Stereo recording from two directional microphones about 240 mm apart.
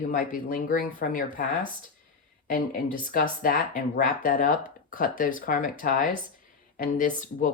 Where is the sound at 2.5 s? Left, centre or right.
Left.